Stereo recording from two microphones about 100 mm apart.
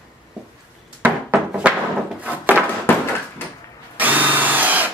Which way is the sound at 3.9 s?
15° right (ahead or behind).